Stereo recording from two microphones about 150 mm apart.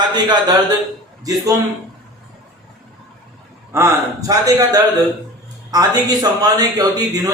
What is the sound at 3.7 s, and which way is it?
Speech, 20° right (ahead or behind).